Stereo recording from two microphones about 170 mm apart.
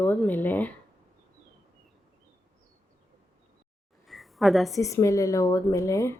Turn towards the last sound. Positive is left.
turn(degrees=15)  # may be behind; listen again after turning